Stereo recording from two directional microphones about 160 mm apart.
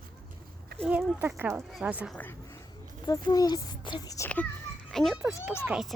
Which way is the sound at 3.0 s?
25° left (ahead or behind).